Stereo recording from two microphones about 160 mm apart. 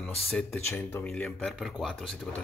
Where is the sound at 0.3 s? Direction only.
10° left (ahead or behind).